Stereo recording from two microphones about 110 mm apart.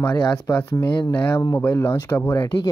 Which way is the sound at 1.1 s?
20° left (ahead or behind).